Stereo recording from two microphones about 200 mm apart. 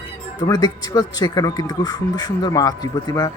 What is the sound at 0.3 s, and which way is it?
Speech, 20° left (ahead or behind).